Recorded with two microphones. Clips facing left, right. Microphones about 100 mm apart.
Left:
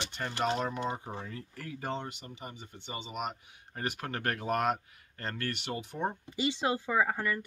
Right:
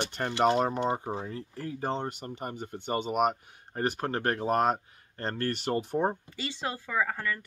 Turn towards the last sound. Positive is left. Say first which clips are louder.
# left 1 dB
turn(degrees=20)  # may be behind; listen again after turning